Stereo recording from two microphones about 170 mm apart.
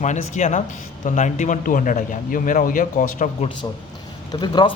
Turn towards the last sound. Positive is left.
turn(degrees=25)  # may be behind; listen again after turning